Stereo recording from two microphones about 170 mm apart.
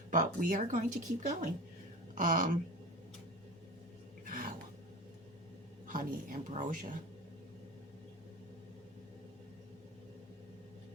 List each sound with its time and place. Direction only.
0.1 s speech: 50° right (ahead or behind)
4.3 s a sound: 55° right (ahead or behind)
5.9 s speech: 55° right (ahead or behind)